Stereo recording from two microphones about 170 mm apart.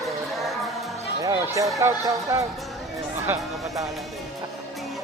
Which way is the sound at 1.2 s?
20° right (ahead or behind).